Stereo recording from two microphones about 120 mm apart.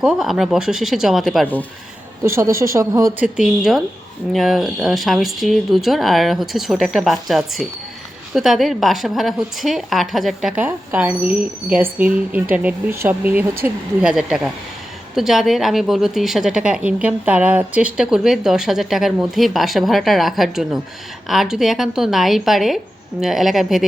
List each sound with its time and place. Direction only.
0.0 s a woman's voice: 5° right (ahead or behind)
2.2 s speech: 20° right (ahead or behind)
3.2 s a woman's voice: 5° right (ahead or behind)
10.5 s speech: 15° right (ahead or behind)
14.0 s a woman's voice: 5° right (ahead or behind)